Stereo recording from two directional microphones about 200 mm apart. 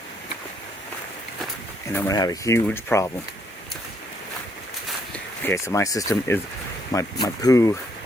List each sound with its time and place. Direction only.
1.9 s speech: 15° left (ahead or behind)
5.5 s speech: 15° left (ahead or behind)